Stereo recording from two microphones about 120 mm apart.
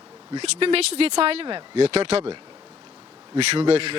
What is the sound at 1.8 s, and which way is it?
Speech, 60° right (ahead or behind).